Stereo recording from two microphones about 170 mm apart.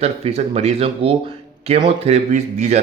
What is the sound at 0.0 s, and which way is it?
Speech, 35° right (ahead or behind).